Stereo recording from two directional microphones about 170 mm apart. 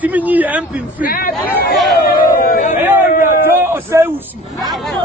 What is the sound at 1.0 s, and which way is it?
Speech, 60° left (ahead or behind).